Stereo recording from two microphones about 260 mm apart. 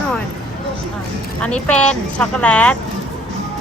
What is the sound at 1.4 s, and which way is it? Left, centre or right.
A woman's voice, centre.